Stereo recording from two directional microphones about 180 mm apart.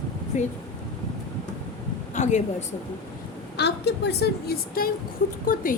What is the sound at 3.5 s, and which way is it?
A woman's voice, 65° left (ahead or behind).